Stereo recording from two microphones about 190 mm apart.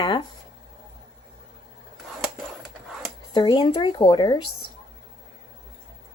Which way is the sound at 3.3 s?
25° left (ahead or behind).